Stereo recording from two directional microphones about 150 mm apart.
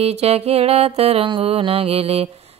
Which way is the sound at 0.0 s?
45° right (ahead or behind).